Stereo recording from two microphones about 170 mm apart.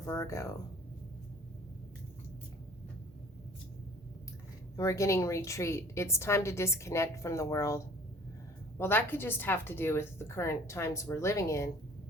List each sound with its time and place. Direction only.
0.0 s a woman's voice: 20° left (ahead or behind)
4.8 s a woman's voice: 20° left (ahead or behind)
8.8 s a woman's voice: 10° left (ahead or behind)